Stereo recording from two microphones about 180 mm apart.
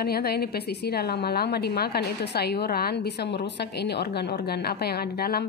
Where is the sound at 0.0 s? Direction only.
60° left (ahead or behind).